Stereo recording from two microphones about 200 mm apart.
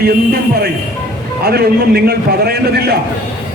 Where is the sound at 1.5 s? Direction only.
50° right (ahead or behind).